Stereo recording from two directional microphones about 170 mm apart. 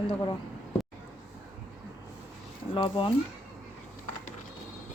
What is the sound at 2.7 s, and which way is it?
Speech, 30° left (ahead or behind).